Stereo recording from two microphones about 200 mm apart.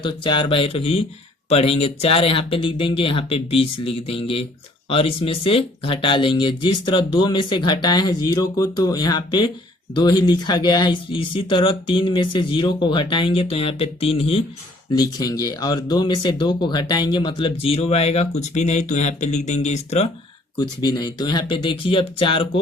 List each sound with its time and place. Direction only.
0.0 s speech: 25° left (ahead or behind)
20.6 s speech: 20° left (ahead or behind)